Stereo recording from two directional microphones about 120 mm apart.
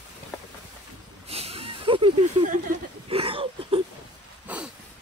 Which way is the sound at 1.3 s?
55° right (ahead or behind).